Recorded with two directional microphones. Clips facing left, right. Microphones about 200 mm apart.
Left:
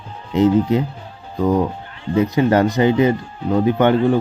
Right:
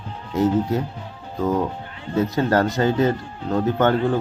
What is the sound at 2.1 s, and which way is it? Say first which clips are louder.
Speech: left 4 dB; 15° left (ahead or behind).